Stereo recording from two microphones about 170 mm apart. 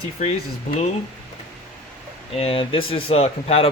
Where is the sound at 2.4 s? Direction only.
35° left (ahead or behind).